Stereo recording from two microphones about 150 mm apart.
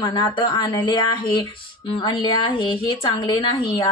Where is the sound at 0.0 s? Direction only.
30° left (ahead or behind).